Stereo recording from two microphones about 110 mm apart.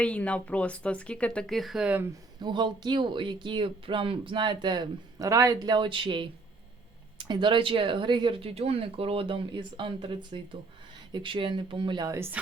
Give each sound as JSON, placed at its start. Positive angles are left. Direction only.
{"t": 0.0, "sound": "speech", "side_deg": 10}
{"t": 2.4, "sound": "speech", "side_deg": -45}
{"t": 12.0, "sound": "speech", "side_deg": -25}